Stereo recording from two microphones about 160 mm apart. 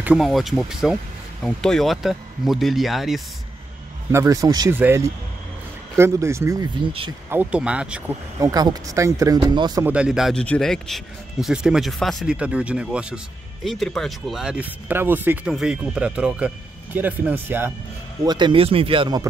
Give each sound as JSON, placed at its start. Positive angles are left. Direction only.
{"t": 0.0, "sound": "speech", "side_deg": 0}
{"t": 4.1, "sound": "speech", "side_deg": -20}
{"t": 7.2, "sound": "speech", "side_deg": -10}
{"t": 8.4, "sound": "speech", "side_deg": -20}
{"t": 9.8, "sound": "speech", "side_deg": -5}
{"t": 18.2, "sound": "speech", "side_deg": -25}